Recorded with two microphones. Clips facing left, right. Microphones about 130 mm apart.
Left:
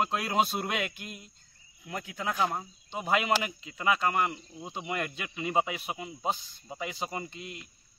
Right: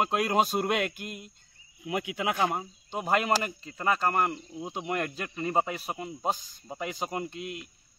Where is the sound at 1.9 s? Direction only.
75° right (ahead or behind).